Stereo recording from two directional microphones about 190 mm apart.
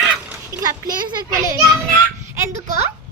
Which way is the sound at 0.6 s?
20° right (ahead or behind).